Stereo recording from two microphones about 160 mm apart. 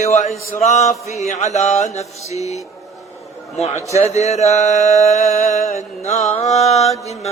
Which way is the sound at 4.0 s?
45° left (ahead or behind).